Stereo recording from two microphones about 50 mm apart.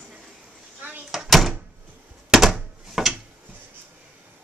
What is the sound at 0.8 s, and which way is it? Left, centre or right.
Door, right.